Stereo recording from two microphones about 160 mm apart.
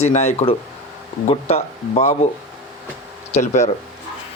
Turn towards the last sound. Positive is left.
turn(degrees=45)  # may be behind; listen again after turning